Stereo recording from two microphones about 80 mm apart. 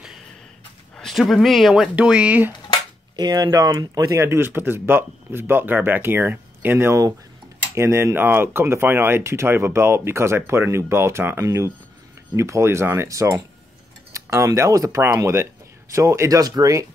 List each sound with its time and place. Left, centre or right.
0.9 s speech: centre
2.0 s speech: centre
3.2 s speech: right
13.1 s speech: right